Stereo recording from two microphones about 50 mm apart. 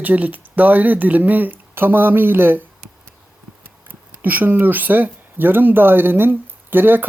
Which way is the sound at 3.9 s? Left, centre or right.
Right.